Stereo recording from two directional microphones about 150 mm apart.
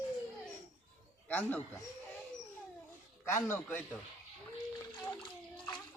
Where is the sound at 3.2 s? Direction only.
15° left (ahead or behind).